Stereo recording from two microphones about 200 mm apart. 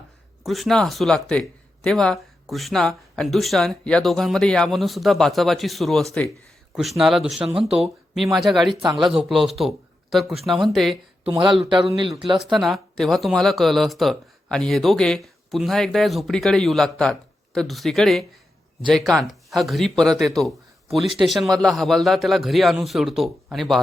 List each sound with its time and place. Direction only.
0.4 s speech: centre (ahead or behind)
11.3 s speech: 20° right (ahead or behind)
12.4 s speech: centre (ahead or behind)